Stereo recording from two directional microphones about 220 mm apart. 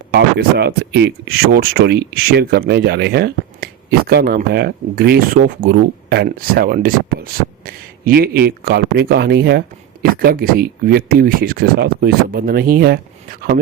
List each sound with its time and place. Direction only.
0.1 s speech: 50° right (ahead or behind)